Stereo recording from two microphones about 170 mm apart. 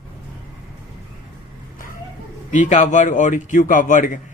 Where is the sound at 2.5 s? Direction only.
45° left (ahead or behind).